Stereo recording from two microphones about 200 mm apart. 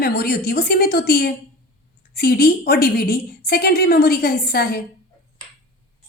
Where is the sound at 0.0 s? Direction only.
50° left (ahead or behind).